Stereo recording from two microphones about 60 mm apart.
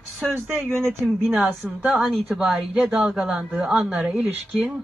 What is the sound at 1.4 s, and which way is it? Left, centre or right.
Speech, right.